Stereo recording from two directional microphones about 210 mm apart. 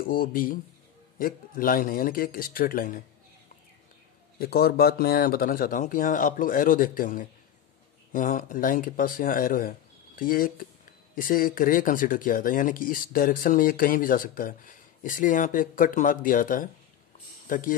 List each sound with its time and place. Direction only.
0.0 s a man's voice: 40° left (ahead or behind)
4.4 s speech: 50° left (ahead or behind)